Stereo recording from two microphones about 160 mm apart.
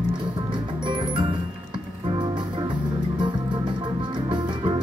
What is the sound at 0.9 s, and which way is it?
Music, 30° right (ahead or behind).